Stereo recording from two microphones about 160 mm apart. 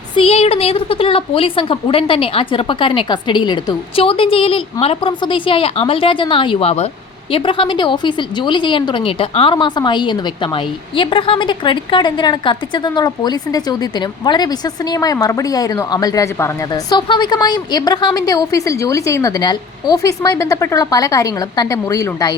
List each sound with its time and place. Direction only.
0.2 s a woman's voice: 40° left (ahead or behind); by 22.4 s 25° left (ahead or behind)